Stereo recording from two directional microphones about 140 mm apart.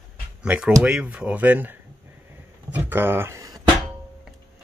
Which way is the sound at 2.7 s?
15° right (ahead or behind).